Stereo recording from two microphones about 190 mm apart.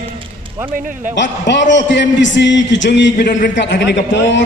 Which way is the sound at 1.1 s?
70° left (ahead or behind).